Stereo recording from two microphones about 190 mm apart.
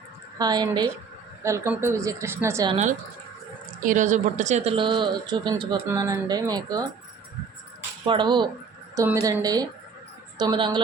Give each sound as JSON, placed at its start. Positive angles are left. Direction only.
{"t": 0.3, "sound": "speech", "side_deg": -20}
{"t": 2.6, "sound": "speech", "side_deg": -35}
{"t": 8.0, "sound": "speech", "side_deg": -25}